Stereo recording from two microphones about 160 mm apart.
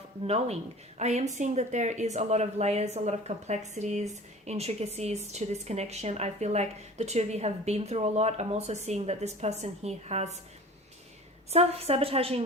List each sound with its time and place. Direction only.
0.3 s a woman's voice: 40° right (ahead or behind)
11.5 s a woman's voice: 40° right (ahead or behind)